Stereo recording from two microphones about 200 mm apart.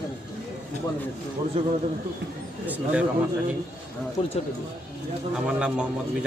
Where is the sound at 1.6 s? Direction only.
30° right (ahead or behind).